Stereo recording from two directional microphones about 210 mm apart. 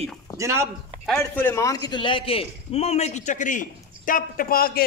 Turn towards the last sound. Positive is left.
turn(degrees=45)  # may be behind; listen again after turning